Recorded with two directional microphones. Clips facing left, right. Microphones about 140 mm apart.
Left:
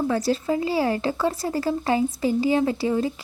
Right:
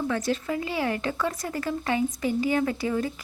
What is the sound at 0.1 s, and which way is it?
Speech, 35° left (ahead or behind).